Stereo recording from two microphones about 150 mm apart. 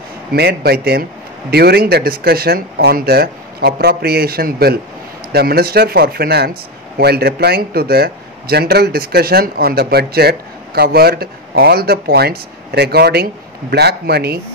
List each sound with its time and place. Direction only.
0.3 s speech: 90° right